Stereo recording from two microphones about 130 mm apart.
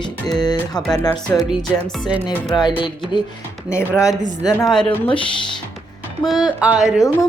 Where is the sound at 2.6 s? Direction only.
35° left (ahead or behind).